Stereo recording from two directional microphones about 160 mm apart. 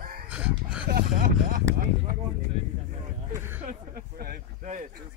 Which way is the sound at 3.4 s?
15° right (ahead or behind).